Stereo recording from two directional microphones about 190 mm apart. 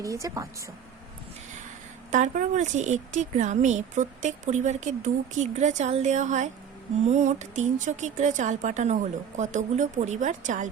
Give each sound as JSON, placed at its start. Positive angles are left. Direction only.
{"t": 0.0, "sound": "speech", "side_deg": -15}
{"t": 2.0, "sound": "a woman's voice", "side_deg": -40}